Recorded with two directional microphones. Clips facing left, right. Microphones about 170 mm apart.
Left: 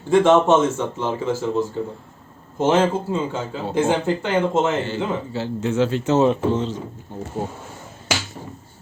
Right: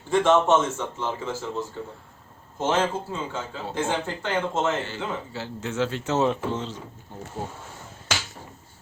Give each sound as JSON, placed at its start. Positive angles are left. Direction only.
{"t": 0.1, "sound": "a man's voice", "side_deg": 15}